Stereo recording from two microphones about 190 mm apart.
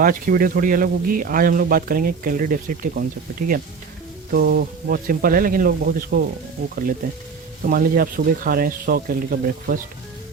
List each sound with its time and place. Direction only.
0.0 s speech: 45° right (ahead or behind)
7.6 s speech: 50° right (ahead or behind)